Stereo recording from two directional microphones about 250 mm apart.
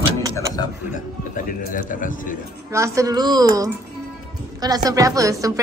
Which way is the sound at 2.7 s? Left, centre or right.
Centre.